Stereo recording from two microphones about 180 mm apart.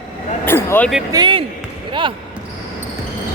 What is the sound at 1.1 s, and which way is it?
Speech, 25° right (ahead or behind).